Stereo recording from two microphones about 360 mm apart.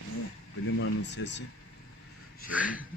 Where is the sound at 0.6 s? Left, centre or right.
Left.